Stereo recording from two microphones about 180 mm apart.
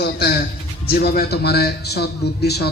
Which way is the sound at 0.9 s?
55° left (ahead or behind).